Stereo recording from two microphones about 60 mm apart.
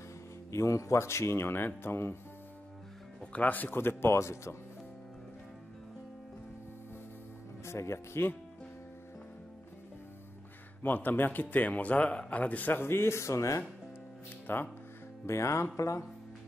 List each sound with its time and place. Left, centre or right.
0.5 s speech: left
3.3 s speech: left
7.6 s speech: left
10.8 s speech: left
12.8 s speech: left
14.5 s speech: left
15.2 s speech: left